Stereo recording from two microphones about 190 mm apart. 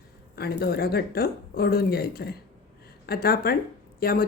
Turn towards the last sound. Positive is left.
turn(degrees=50)  # may be behind; listen again after turning